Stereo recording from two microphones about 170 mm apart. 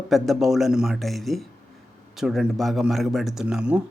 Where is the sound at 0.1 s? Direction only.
Centre (ahead or behind).